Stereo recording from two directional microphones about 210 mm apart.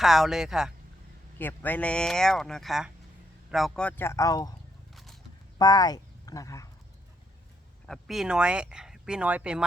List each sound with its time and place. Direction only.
0.0 s speech: centre (ahead or behind)
1.4 s speech: 10° left (ahead or behind)
5.5 s speech: 20° left (ahead or behind)
7.9 s speech: centre (ahead or behind)